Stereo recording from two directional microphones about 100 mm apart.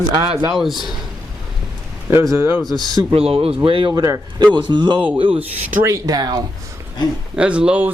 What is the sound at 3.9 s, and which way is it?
Speech, 35° right (ahead or behind).